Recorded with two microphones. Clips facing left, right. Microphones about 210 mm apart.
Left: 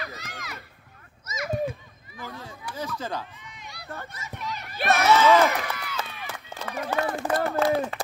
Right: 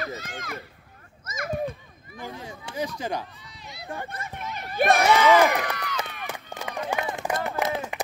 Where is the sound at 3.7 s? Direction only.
20° right (ahead or behind).